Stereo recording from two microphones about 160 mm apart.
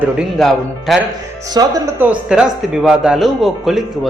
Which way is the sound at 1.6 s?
25° right (ahead or behind).